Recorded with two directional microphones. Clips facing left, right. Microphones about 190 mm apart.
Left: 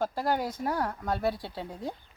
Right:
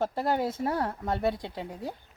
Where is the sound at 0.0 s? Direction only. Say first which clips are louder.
Right 1 dB; 25° right (ahead or behind).